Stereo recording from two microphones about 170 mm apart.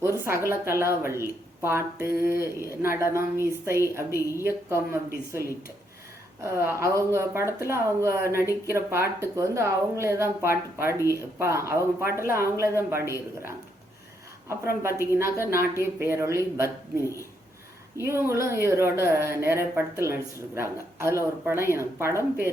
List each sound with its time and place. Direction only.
0.0 s a woman's voice: 15° right (ahead or behind)
4.1 s a woman's voice: 20° left (ahead or behind)
4.4 s a woman's voice: 15° right (ahead or behind)
14.4 s a woman's voice: 15° right (ahead or behind)
17.9 s a woman's voice: 15° right (ahead or behind)